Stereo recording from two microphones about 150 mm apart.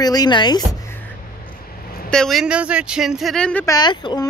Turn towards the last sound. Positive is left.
turn(degrees=30)  # may be behind; listen again after turning